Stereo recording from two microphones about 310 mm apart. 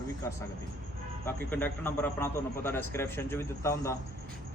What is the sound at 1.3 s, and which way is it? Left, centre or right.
A man's voice, centre.